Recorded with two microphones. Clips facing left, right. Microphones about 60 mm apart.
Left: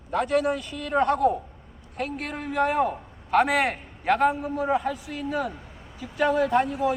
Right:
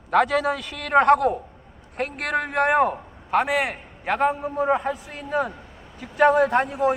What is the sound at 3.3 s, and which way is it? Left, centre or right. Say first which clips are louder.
A man's voice: left 1 dB; centre.